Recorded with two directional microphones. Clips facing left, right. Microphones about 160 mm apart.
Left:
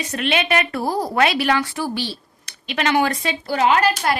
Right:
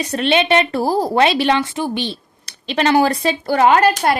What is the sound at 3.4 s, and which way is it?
Speech, 55° right (ahead or behind).